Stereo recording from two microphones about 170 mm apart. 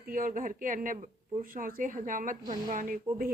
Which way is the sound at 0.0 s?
55° right (ahead or behind).